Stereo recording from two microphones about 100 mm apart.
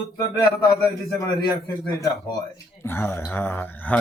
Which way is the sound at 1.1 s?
35° left (ahead or behind).